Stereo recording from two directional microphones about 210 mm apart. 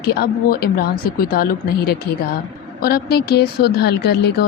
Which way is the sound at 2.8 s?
50° left (ahead or behind).